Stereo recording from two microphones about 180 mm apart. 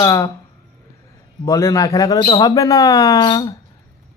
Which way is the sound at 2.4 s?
20° left (ahead or behind).